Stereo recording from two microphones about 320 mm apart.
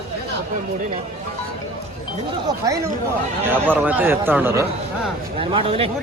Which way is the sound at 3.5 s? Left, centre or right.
Centre.